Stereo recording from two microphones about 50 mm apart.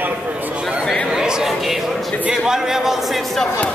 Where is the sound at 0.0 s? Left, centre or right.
Right.